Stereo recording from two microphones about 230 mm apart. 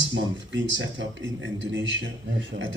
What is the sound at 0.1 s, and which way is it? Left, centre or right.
Speech, right.